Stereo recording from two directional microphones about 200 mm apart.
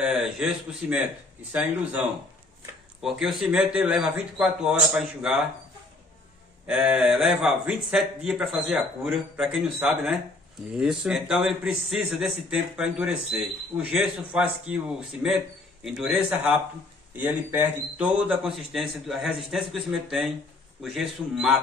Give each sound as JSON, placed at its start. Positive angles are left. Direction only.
{"t": 0.0, "sound": "a man's voice", "side_deg": -5}
{"t": 6.7, "sound": "a man's voice", "side_deg": -5}